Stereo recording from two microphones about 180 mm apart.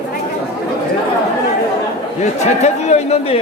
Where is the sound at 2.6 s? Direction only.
40° left (ahead or behind).